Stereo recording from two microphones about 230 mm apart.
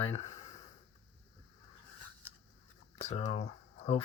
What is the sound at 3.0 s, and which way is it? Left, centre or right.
Speech, left.